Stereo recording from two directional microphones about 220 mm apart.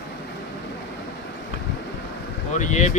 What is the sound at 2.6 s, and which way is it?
Speech, 35° left (ahead or behind).